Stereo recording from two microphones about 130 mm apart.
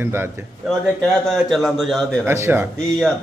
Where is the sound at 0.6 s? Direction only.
Centre (ahead or behind).